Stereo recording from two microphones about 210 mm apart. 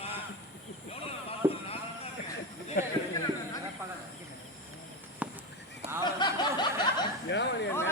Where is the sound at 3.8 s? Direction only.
15° right (ahead or behind).